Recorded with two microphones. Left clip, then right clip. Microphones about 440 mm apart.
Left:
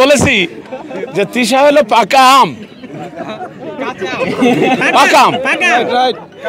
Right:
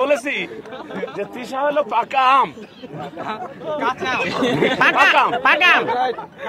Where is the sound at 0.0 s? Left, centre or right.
Left.